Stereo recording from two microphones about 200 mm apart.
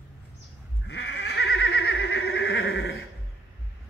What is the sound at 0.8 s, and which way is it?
Neigh, 55° left (ahead or behind).